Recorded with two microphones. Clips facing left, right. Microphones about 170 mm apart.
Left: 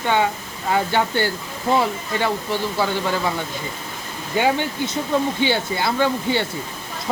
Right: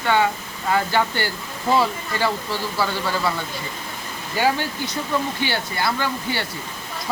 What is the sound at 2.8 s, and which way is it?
Speech, 20° left (ahead or behind).